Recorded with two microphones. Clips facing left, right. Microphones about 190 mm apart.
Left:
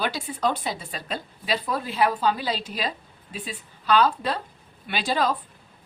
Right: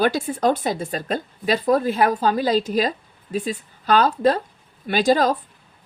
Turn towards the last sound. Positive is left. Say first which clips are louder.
# right 7 dB
turn(degrees=-45)  # may be behind; listen again after turning